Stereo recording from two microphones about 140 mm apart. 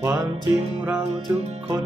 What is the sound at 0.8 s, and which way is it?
Music, 10° right (ahead or behind).